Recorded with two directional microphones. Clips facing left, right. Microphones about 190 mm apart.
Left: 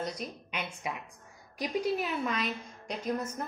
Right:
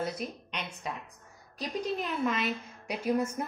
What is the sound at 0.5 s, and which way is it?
A woman's voice, 10° left (ahead or behind).